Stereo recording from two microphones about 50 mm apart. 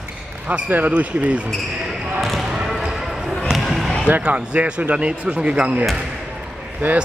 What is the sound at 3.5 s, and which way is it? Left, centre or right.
Basketball bounce, centre.